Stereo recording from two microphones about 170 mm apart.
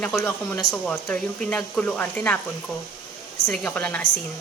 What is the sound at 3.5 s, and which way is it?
Speech, 5° left (ahead or behind).